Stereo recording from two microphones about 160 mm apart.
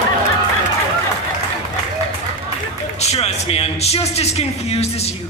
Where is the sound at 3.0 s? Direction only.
40° left (ahead or behind).